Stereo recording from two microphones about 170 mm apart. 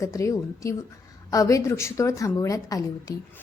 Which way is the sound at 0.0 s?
20° left (ahead or behind).